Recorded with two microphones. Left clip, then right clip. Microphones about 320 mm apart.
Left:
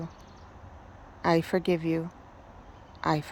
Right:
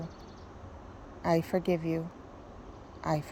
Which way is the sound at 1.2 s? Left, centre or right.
Centre.